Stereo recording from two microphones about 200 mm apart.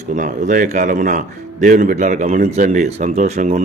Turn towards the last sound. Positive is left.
turn(degrees=-35)  # may be behind; listen again after turning